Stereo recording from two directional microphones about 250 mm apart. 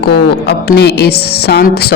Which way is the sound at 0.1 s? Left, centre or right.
Left.